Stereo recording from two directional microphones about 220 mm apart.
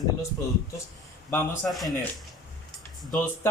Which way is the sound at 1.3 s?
5° left (ahead or behind).